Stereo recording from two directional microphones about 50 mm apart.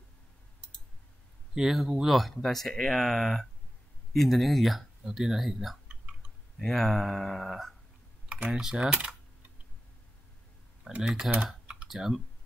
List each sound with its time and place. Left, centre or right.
1.5 s speech: centre
8.5 s speech: centre
11.0 s speech: centre
11.6 s typing: right
11.9 s speech: centre